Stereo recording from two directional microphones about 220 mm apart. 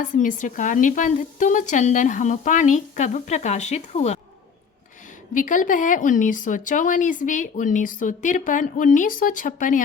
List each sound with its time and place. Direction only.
0.0 s speech: 35° left (ahead or behind)
5.3 s speech: 35° left (ahead or behind)